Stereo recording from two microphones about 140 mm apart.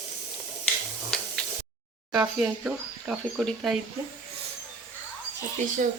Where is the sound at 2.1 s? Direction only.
5° right (ahead or behind).